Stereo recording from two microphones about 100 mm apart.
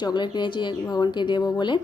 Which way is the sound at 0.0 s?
50° left (ahead or behind).